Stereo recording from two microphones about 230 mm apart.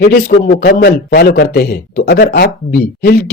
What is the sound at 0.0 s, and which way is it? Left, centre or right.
A man's voice, left.